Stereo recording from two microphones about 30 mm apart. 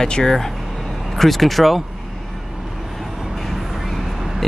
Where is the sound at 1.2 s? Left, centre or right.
Centre.